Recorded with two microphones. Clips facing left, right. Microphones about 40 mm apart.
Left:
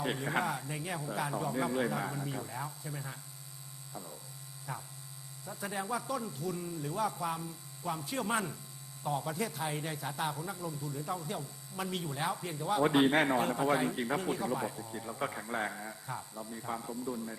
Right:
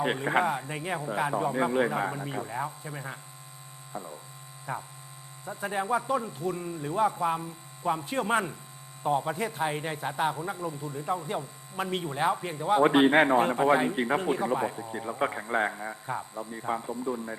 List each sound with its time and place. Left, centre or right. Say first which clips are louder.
0.0 s a man's voice: right 7 dB; right